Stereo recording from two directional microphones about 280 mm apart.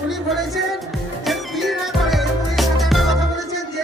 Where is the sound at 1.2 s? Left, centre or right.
Centre.